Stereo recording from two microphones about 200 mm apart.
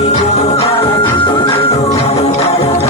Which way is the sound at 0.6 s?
30° left (ahead or behind).